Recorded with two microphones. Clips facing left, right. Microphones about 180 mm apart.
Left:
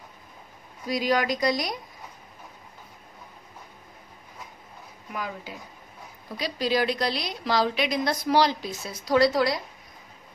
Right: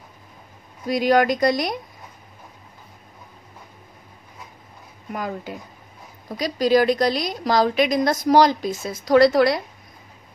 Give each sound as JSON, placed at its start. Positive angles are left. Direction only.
{"t": 0.8, "sound": "speech", "side_deg": -55}
{"t": 5.1, "sound": "a woman's voice", "side_deg": -50}